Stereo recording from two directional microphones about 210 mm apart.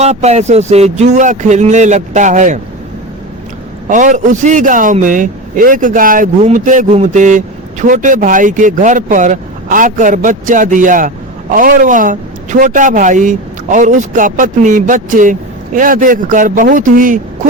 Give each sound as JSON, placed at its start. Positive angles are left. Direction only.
{"t": 0.0, "sound": "a man's voice", "side_deg": -30}
{"t": 3.8, "sound": "a man's voice", "side_deg": -35}